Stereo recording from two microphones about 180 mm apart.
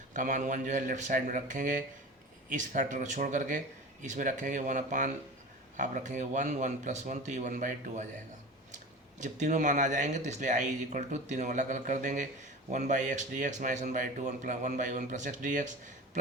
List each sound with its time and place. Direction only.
0.1 s speech: 45° right (ahead or behind)